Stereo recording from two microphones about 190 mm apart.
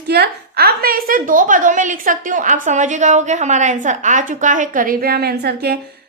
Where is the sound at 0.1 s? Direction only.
55° right (ahead or behind).